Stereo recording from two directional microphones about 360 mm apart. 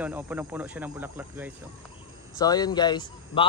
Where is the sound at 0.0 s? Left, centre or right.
Centre.